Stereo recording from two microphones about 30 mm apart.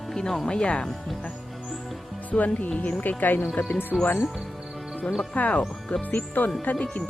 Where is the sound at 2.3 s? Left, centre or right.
Left.